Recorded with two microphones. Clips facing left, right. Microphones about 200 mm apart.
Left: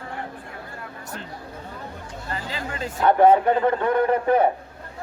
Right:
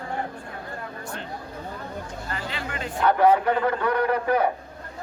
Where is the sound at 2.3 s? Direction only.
30° left (ahead or behind).